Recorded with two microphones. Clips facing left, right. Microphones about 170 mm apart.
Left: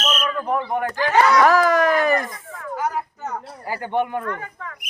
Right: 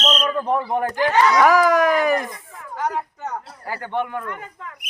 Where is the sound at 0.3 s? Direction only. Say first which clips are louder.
Right 2 dB; 30° right (ahead or behind).